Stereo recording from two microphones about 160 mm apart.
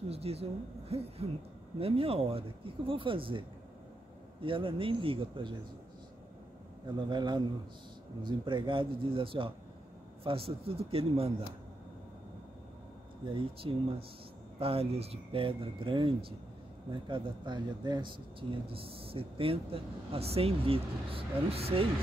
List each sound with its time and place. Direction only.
0.1 s speech: 40° right (ahead or behind)
7.1 s a man's voice: 30° right (ahead or behind)
13.3 s speech: 35° right (ahead or behind)